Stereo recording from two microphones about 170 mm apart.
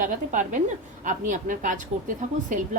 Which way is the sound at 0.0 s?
50° right (ahead or behind).